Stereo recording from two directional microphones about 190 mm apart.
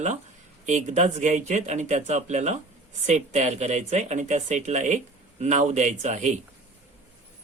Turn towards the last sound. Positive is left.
turn(degrees=-40)  # may be behind; listen again after turning